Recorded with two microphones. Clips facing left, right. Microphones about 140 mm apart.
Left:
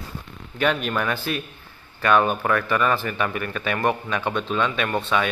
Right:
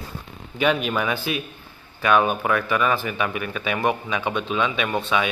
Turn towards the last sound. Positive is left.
turn(degrees=-5)  # may be behind; listen again after turning